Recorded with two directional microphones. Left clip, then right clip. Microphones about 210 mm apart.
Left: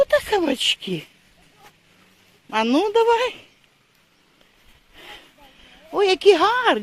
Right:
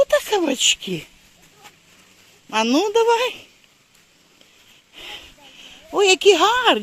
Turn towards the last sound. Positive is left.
turn(degrees=-10)  # may be behind; listen again after turning